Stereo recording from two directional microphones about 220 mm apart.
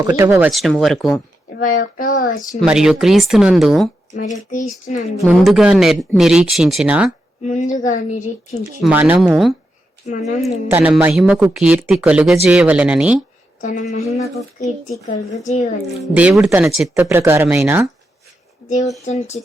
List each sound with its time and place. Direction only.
0.1 s speech: 10° right (ahead or behind)
1.5 s speech: 40° left (ahead or behind)
2.6 s speech: 5° right (ahead or behind)
4.1 s speech: 35° left (ahead or behind)
5.2 s speech: centre (ahead or behind)
7.4 s speech: 35° left (ahead or behind)
8.8 s speech: 5° right (ahead or behind)
13.6 s speech: 35° left (ahead or behind)
16.1 s speech: 5° right (ahead or behind)
19.0 s speech: 30° left (ahead or behind)